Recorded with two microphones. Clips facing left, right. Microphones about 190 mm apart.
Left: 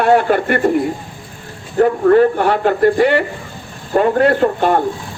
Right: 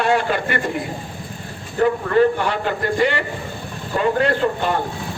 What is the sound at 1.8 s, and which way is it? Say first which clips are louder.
Speech: left 5 dB; 45° left (ahead or behind).